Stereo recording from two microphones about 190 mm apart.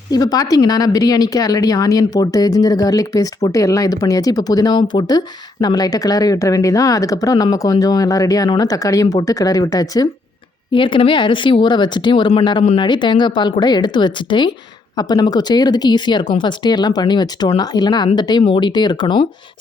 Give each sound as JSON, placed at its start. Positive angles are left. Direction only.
{"t": 0.1, "sound": "speech", "side_deg": 20}